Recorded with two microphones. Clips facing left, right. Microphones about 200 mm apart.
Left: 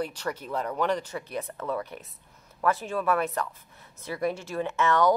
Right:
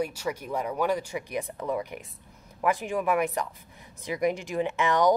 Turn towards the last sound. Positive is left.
turn(degrees=-15)  # may be behind; listen again after turning